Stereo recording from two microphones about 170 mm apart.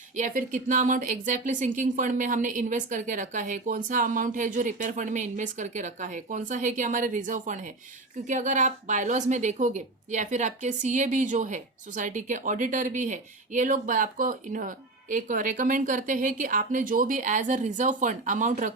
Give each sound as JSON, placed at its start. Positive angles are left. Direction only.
{"t": 0.2, "sound": "a woman's voice", "side_deg": -50}